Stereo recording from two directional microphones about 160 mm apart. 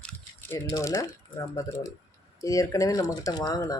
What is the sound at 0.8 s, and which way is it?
Speech, 20° left (ahead or behind).